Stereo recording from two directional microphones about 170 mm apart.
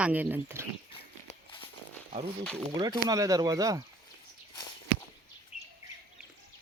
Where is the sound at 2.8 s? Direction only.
20° right (ahead or behind).